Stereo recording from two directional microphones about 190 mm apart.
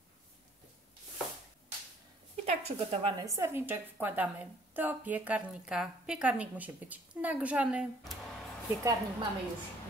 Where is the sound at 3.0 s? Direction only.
20° right (ahead or behind).